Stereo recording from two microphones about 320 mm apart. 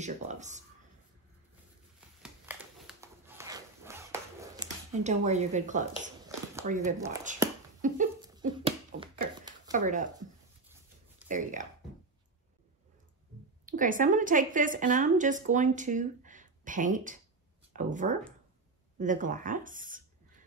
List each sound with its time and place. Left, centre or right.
0.0 s a woman's voice: right
2.2 s dog: centre
5.0 s a woman's voice: right
7.8 s a sound: right
11.2 s a woman's voice: right
13.7 s a woman's voice: right